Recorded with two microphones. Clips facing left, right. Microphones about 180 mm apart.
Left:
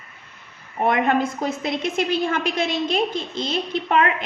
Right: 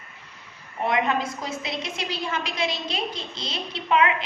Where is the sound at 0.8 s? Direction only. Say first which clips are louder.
Left 4 dB; 55° left (ahead or behind).